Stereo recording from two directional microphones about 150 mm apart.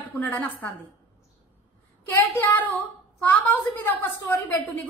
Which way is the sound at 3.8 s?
15° left (ahead or behind).